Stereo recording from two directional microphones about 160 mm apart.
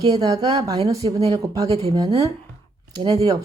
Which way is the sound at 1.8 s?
35° right (ahead or behind).